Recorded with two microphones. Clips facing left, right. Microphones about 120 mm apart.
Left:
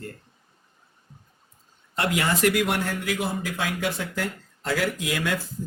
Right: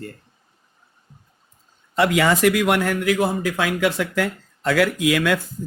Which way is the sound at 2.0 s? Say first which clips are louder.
Right 5 dB; 90° right.